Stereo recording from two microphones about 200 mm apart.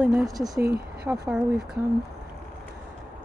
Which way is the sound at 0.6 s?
50° right (ahead or behind).